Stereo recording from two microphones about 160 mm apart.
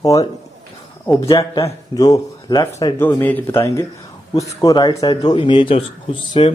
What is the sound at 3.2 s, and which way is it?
Speech, 10° left (ahead or behind).